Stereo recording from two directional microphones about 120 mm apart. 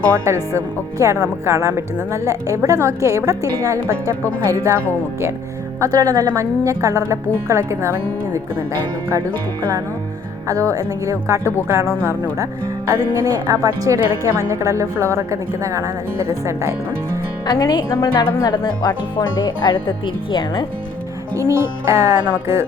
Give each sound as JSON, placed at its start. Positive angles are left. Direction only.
{"t": 0.3, "sound": "a woman's voice", "side_deg": -25}
{"t": 5.8, "sound": "a woman's voice", "side_deg": -30}
{"t": 10.5, "sound": "a woman's voice", "side_deg": -30}
{"t": 12.9, "sound": "a woman's voice", "side_deg": -25}
{"t": 17.4, "sound": "speech", "side_deg": 35}
{"t": 21.3, "sound": "a woman's voice", "side_deg": -25}